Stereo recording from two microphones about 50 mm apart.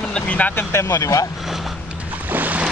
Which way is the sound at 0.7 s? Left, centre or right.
Left.